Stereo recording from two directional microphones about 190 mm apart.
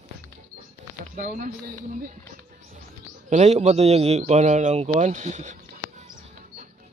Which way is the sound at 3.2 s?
35° right (ahead or behind).